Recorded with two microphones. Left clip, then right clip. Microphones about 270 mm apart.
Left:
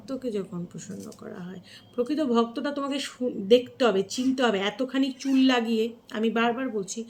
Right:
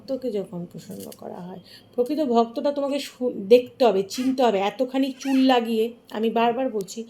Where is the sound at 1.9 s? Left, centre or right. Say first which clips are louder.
Right 4 dB; centre.